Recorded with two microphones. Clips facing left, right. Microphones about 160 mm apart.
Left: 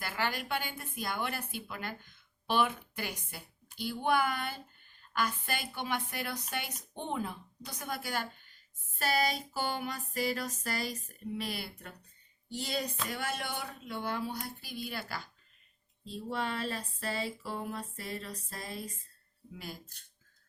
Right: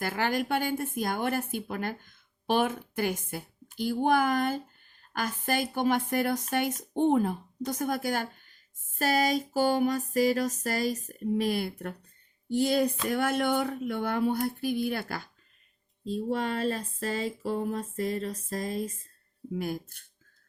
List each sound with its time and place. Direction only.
0.0 s a woman's voice: 45° right (ahead or behind)
16.0 s a sound: 40° right (ahead or behind)
19.5 s a woman's voice: 55° right (ahead or behind)